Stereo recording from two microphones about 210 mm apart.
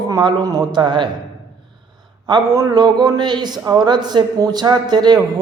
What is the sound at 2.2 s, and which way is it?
Speech, 20° right (ahead or behind).